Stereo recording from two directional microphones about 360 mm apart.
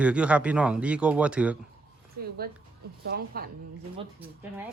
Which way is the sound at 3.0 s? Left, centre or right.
Right.